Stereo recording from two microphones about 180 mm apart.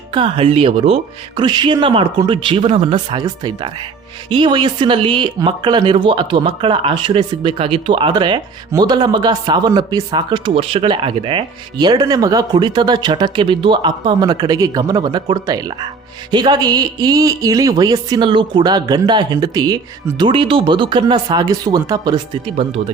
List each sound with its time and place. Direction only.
0.1 s speech: 30° right (ahead or behind)